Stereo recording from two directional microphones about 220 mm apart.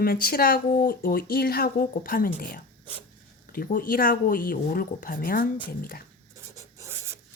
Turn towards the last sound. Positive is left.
turn(degrees=-15)  # may be behind; listen again after turning